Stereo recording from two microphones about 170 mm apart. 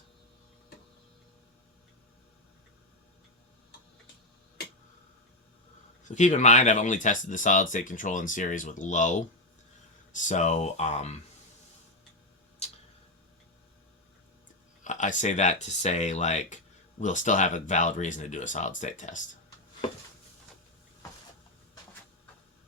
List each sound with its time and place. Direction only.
6.1 s speech: 45° left (ahead or behind)
12.6 s tick-tock: 40° left (ahead or behind)
14.8 s speech: 45° left (ahead or behind)